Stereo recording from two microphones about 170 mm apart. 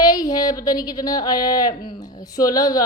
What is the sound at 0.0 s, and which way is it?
A woman's voice, 20° left (ahead or behind).